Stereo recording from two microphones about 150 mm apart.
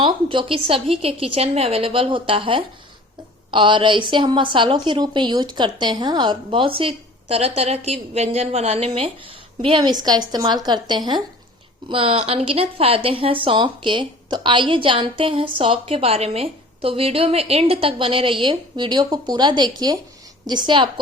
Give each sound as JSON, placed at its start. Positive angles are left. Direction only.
{"t": 0.0, "sound": "a woman's voice", "side_deg": -35}